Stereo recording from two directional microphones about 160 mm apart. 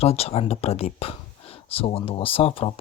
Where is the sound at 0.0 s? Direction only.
40° left (ahead or behind).